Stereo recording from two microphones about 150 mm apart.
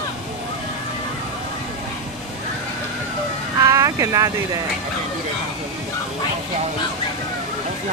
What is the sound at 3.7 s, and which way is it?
Vehicle, 20° right (ahead or behind).